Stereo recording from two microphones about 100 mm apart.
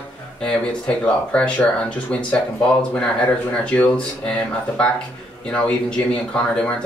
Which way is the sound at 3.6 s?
15° left (ahead or behind).